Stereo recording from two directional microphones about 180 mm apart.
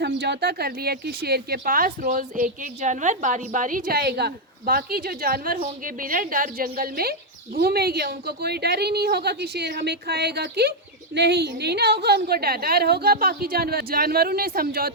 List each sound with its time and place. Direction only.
0.0 s speech: 65° right (ahead or behind)